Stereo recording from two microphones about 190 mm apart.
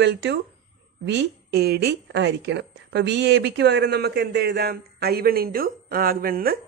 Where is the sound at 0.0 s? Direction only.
70° right (ahead or behind).